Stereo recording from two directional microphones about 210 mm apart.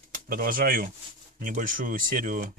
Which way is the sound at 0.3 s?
45° right (ahead or behind).